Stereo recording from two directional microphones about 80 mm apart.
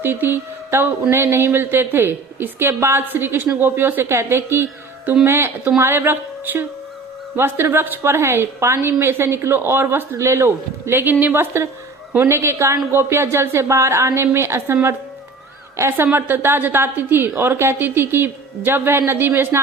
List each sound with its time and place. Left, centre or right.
0.0 s a woman's voice: right
16.1 s a woman's voice: right